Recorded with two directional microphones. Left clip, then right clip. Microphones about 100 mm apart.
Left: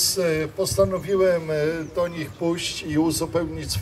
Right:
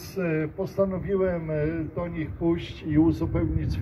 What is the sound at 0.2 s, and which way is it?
A man's voice, 20° left (ahead or behind).